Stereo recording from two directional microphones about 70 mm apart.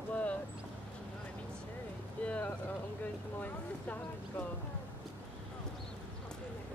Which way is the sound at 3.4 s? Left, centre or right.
Left.